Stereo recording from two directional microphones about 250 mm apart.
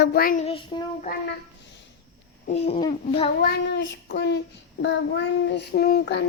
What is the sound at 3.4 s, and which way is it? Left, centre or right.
Child singing, left.